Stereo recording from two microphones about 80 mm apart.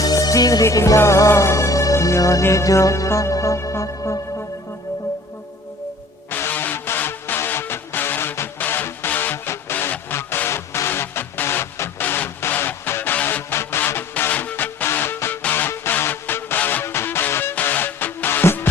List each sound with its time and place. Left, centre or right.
0.0 s music: left
6.3 s music: left